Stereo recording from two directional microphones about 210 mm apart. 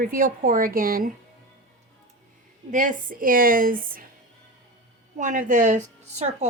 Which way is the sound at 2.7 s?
40° right (ahead or behind).